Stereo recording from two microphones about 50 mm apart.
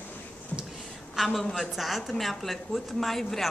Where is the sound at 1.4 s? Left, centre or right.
Centre.